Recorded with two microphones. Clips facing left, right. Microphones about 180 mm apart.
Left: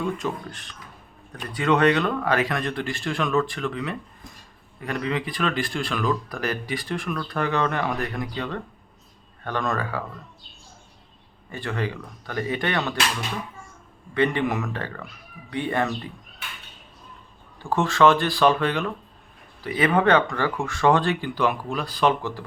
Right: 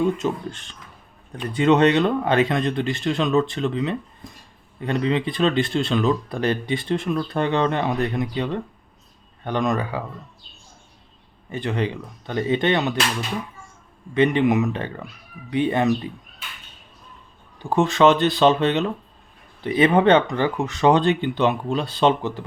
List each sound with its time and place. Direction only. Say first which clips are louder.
0.0 s speech: right 6 dB; 25° right (ahead or behind)
11.5 s speech: right 4 dB; 20° right (ahead or behind)
14.1 s speech: right 5 dB; 20° right (ahead or behind)
17.6 s speech: right 2 dB; 20° right (ahead or behind)